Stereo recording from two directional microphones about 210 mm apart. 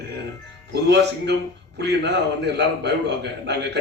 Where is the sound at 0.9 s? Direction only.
55° right (ahead or behind).